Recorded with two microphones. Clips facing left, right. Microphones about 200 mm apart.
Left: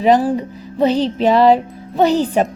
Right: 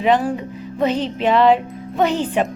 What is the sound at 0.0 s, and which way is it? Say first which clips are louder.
Speech: left 4 dB; 35° left (ahead or behind).